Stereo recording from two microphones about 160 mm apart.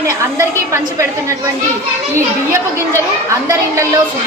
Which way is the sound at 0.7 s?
20° right (ahead or behind).